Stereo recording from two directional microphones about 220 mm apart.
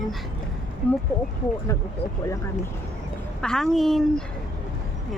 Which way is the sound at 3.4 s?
5° left (ahead or behind).